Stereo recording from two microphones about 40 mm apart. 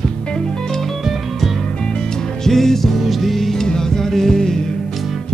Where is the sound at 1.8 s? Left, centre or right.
Centre.